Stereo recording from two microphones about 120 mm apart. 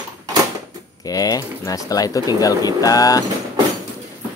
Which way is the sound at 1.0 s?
30° left (ahead or behind).